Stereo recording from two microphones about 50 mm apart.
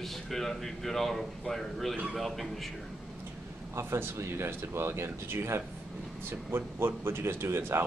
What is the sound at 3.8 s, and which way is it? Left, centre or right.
Speech, right.